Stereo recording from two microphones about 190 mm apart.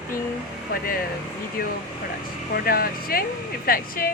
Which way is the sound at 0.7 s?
50° left (ahead or behind).